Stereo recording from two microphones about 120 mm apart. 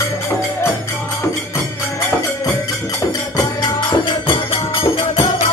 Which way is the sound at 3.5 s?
45° left (ahead or behind).